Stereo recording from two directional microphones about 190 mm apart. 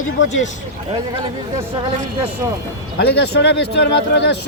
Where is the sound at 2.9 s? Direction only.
60° left (ahead or behind).